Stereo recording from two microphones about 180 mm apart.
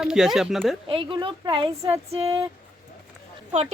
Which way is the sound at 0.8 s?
30° right (ahead or behind).